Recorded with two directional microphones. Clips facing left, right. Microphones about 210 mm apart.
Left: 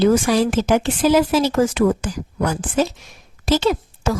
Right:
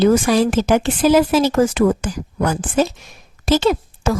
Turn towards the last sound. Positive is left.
turn(degrees=-50)  # may be behind; listen again after turning